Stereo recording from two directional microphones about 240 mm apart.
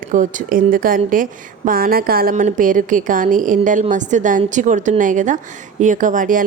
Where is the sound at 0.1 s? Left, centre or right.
Right.